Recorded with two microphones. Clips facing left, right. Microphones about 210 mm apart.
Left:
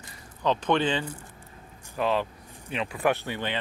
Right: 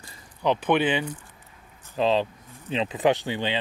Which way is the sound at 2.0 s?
25° right (ahead or behind).